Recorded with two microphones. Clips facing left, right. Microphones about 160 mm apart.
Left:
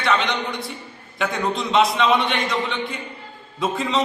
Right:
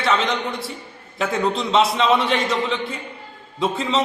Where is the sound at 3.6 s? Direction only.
Centre (ahead or behind).